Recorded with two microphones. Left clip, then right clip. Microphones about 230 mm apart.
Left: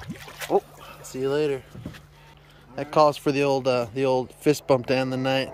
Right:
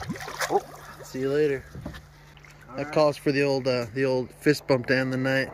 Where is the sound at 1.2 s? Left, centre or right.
Left.